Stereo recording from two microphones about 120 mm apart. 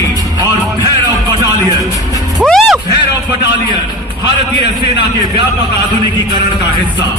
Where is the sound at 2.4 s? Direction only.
Centre (ahead or behind).